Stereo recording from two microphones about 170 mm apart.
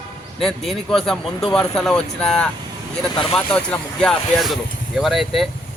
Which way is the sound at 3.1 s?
30° left (ahead or behind).